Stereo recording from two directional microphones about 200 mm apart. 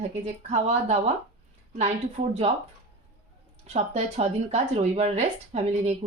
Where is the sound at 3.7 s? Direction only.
35° right (ahead or behind).